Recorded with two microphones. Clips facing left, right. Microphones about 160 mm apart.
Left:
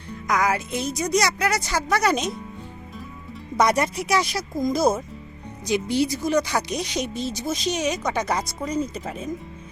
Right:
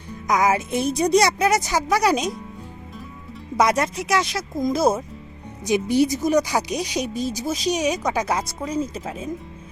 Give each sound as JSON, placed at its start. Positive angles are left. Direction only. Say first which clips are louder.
{"t": 0.3, "sound": "speech", "louder": "right 3 dB", "side_deg": -20}
{"t": 3.6, "sound": "speech", "louder": "right 1 dB", "side_deg": 0}
{"t": 5.6, "sound": "speech", "louder": "right 3 dB", "side_deg": -20}